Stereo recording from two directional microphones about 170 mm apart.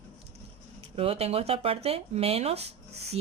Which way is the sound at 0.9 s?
35° right (ahead or behind).